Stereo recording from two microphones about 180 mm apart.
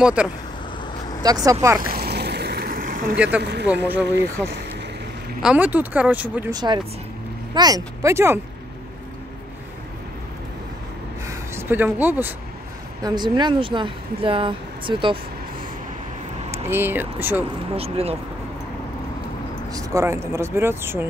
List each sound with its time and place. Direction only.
0.0 s speech: 5° right (ahead or behind)
1.2 s speech: 20° right (ahead or behind)
1.8 s boat: 55° right (ahead or behind)
3.2 s speech: 10° right (ahead or behind)
4.0 s speech: 70° right (ahead or behind)
5.4 s speech: 5° right (ahead or behind)
6.5 s speech: 25° right (ahead or behind)
11.2 s speech: 15° right (ahead or behind)
13.0 s speech: 25° right (ahead or behind)
16.6 s speech: 10° right (ahead or behind)
17.7 s speech: 35° right (ahead or behind)
19.7 s speech: 20° right (ahead or behind)